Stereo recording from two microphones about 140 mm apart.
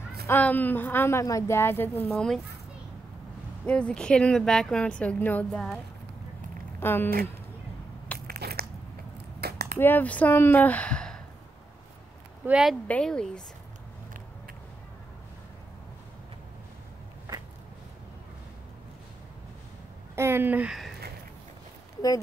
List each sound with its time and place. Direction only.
0.3 s a woman's voice: 10° left (ahead or behind)
2.0 s speech: 5° left (ahead or behind)
3.6 s a woman's voice: 5° left (ahead or behind)
6.8 s speech: 15° left (ahead or behind)
8.1 s biting: 10° left (ahead or behind)
9.8 s a woman's voice: 15° left (ahead or behind)
12.4 s speech: 5° right (ahead or behind)
12.8 s a woman's voice: 10° left (ahead or behind)
20.2 s speech: 15° right (ahead or behind)